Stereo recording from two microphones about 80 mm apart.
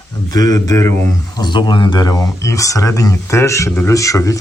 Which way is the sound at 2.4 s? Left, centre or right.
Left.